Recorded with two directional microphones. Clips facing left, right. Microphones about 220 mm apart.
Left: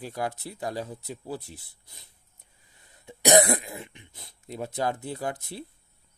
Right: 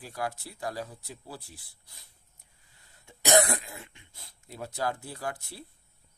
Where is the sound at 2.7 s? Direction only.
20° left (ahead or behind).